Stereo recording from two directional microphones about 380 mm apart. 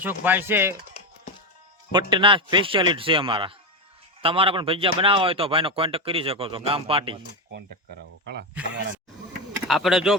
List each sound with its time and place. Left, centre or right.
0.0 s speech: centre
1.9 s speech: centre
8.7 s speech: right
9.6 s speech: centre